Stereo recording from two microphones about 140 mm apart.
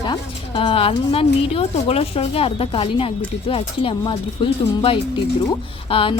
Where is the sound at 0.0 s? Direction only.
35° left (ahead or behind).